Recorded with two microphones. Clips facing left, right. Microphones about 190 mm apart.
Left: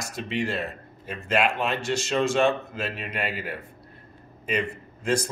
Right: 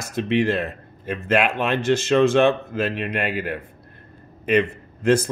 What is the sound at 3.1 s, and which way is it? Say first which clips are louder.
A man's voice: right 6 dB; 55° right (ahead or behind).